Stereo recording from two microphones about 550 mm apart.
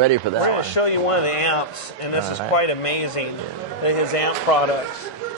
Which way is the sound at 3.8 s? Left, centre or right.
Left.